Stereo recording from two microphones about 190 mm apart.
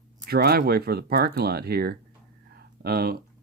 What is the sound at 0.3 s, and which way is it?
Speech, 55° right (ahead or behind).